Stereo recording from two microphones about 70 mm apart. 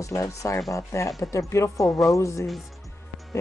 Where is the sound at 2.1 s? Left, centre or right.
Left.